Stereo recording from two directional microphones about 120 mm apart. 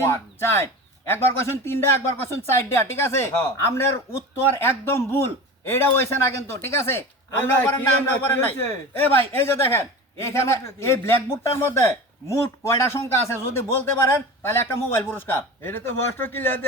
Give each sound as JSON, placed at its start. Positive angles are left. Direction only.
{"t": 0.1, "sound": "a man's voice", "side_deg": 20}